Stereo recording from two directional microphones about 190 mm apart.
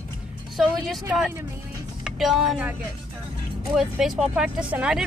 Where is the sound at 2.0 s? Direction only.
Centre (ahead or behind).